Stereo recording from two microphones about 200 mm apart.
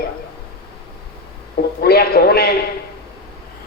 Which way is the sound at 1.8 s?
50° left (ahead or behind).